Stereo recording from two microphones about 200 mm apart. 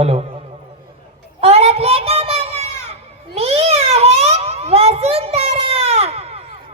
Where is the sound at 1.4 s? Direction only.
30° right (ahead or behind).